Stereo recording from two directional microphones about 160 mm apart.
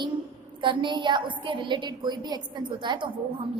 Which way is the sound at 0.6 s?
30° right (ahead or behind).